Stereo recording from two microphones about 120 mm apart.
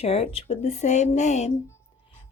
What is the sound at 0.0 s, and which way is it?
Speech, 55° left (ahead or behind).